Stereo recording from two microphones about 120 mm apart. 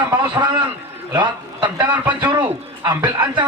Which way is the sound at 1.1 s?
40° right (ahead or behind).